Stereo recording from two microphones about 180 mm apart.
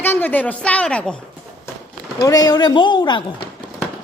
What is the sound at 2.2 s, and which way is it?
Speech, 20° left (ahead or behind).